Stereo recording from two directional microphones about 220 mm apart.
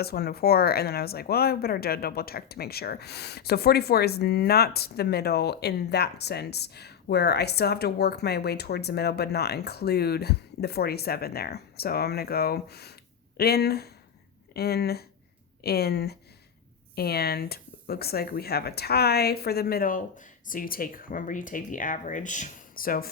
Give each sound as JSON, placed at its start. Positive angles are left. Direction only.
{"t": 0.0, "sound": "speech", "side_deg": 45}